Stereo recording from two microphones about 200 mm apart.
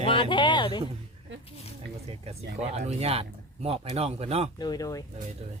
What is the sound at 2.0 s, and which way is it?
Speech, 30° right (ahead or behind).